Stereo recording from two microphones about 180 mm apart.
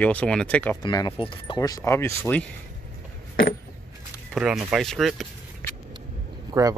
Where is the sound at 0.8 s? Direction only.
25° left (ahead or behind).